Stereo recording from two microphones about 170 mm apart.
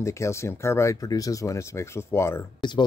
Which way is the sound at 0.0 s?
15° left (ahead or behind).